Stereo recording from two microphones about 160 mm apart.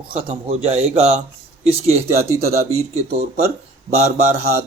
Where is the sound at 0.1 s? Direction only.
40° right (ahead or behind).